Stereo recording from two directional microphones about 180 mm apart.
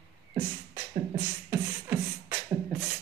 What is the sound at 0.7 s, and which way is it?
Beatboxing, 25° right (ahead or behind).